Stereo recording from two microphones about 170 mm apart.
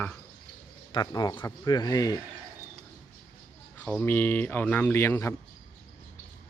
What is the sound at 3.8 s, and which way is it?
Speech, 10° left (ahead or behind).